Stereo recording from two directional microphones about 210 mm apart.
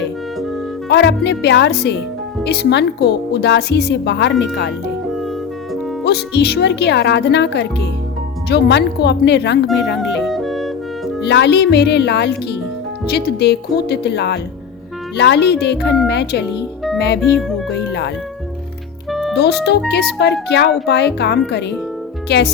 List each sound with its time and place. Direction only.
0.9 s speech: 55° left (ahead or behind)
6.1 s speech: 50° left (ahead or behind)
10.0 s music: centre (ahead or behind)
11.3 s speech: 55° left (ahead or behind)
19.4 s speech: 50° left (ahead or behind)